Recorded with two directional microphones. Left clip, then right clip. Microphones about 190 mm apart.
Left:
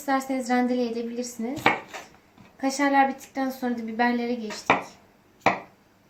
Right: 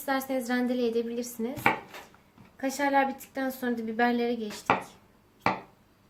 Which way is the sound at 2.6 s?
50° right (ahead or behind).